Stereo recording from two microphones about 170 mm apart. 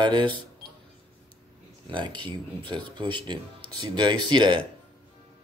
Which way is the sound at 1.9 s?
25° right (ahead or behind).